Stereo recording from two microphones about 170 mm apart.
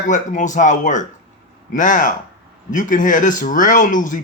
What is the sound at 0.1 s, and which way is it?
Speech, 45° left (ahead or behind).